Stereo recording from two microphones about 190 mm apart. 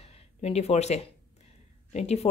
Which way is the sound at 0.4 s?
35° left (ahead or behind).